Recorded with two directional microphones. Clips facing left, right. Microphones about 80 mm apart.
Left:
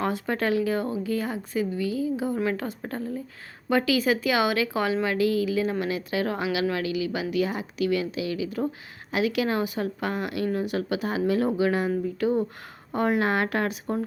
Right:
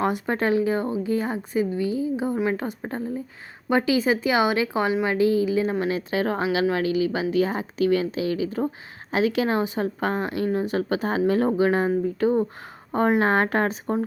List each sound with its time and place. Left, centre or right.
0.0 s a woman's voice: right